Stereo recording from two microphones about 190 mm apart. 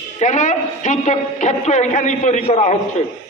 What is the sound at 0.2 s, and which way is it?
A woman's voice, 40° left (ahead or behind).